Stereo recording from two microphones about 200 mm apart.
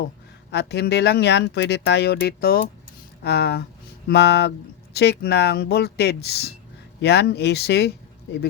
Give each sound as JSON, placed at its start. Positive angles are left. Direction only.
{"t": 0.5, "sound": "speech", "side_deg": 55}